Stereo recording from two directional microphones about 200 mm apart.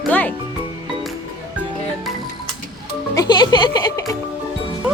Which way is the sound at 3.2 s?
20° left (ahead or behind).